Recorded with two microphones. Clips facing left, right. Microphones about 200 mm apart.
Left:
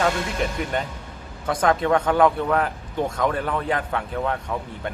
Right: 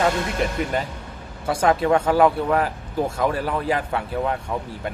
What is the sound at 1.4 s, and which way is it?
Speech, 10° right (ahead or behind).